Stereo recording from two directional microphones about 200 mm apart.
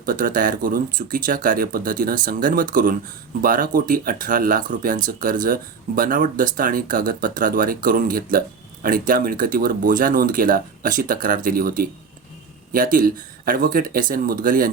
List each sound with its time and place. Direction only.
0.0 s speech: 45° right (ahead or behind)